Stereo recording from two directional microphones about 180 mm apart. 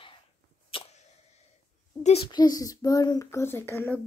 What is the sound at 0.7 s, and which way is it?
Arrow, 30° left (ahead or behind).